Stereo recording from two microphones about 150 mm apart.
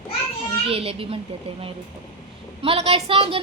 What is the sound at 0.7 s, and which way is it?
A woman's voice, 40° right (ahead or behind).